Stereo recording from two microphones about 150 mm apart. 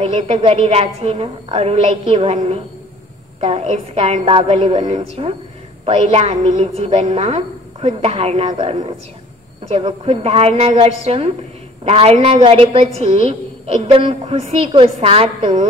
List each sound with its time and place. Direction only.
0.0 s a woman's voice: 45° right (ahead or behind)